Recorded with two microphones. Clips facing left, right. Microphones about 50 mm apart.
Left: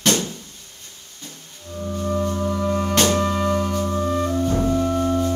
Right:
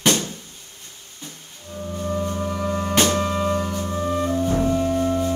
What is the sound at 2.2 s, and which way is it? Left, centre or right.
Music, centre.